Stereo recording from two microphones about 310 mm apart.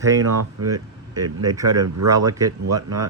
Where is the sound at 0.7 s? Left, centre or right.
Centre.